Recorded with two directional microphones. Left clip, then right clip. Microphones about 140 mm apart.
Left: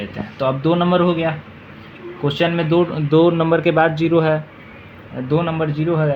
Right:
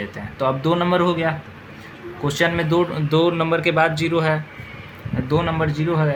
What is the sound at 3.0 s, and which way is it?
A man's voice, 45° left (ahead or behind).